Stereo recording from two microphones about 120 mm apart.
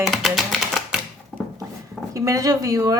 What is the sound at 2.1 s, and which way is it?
Speech, 25° right (ahead or behind).